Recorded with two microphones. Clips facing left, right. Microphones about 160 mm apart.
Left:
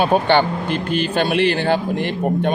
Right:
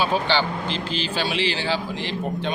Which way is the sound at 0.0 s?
55° left (ahead or behind).